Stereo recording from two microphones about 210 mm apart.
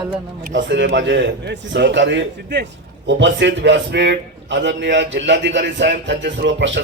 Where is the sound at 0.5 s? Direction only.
60° right (ahead or behind).